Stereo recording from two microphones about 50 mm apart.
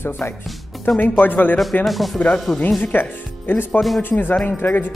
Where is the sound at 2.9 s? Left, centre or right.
Left.